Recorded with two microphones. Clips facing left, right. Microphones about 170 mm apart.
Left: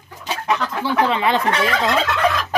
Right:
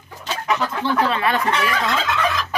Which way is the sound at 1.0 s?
20° left (ahead or behind).